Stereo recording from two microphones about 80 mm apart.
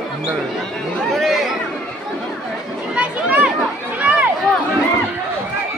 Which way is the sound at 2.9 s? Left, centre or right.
Centre.